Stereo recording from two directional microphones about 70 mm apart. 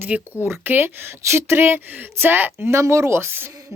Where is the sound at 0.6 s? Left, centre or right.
Right.